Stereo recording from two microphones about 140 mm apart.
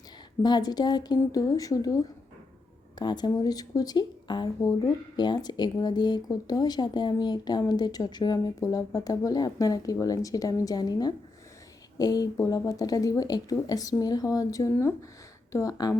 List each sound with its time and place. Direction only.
0.4 s speech: 30° left (ahead or behind)